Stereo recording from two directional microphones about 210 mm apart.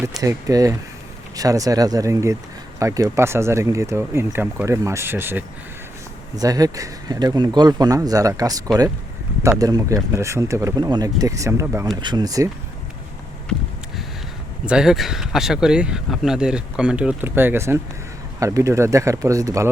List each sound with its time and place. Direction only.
0.2 s speech: 15° right (ahead or behind)
14.7 s speech: centre (ahead or behind)